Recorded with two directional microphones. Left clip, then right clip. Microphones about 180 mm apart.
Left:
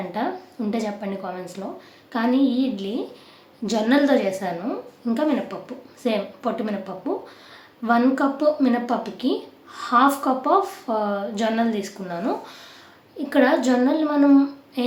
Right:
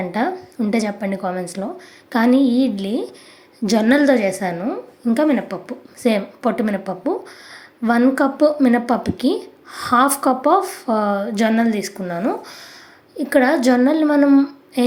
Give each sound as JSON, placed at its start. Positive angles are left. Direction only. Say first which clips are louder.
{"t": 0.1, "sound": "a woman's voice", "louder": "right 5 dB", "side_deg": -40}